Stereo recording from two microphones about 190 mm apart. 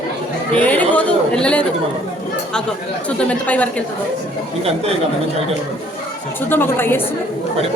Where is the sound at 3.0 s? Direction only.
5° left (ahead or behind).